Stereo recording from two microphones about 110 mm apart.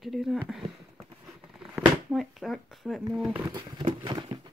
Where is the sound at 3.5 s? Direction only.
50° right (ahead or behind).